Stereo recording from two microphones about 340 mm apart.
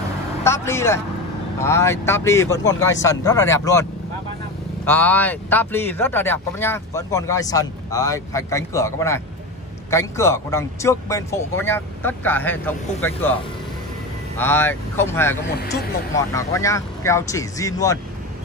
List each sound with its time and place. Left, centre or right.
0.4 s speech: centre
4.8 s speech: centre
14.4 s speech: centre
15.4 s speech: left
16.3 s speech: centre